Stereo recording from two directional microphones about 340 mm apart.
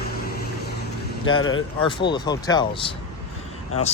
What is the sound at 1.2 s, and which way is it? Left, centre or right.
Speech, left.